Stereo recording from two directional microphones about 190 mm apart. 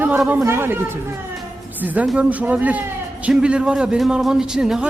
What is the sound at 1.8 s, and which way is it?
Speech, 5° right (ahead or behind).